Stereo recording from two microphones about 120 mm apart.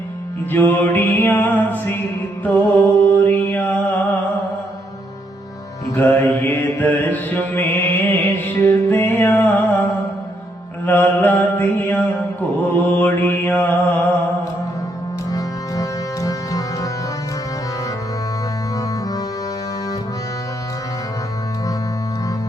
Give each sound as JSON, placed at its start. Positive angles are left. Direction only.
{"t": 0.5, "sound": "mantra", "side_deg": 15}
{"t": 3.2, "sound": "mantra", "side_deg": 15}
{"t": 6.0, "sound": "mantra", "side_deg": 15}
{"t": 10.8, "sound": "mantra", "side_deg": 15}
{"t": 15.3, "sound": "music", "side_deg": 30}